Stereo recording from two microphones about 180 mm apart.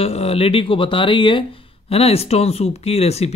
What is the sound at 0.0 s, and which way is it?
Speech, 35° left (ahead or behind).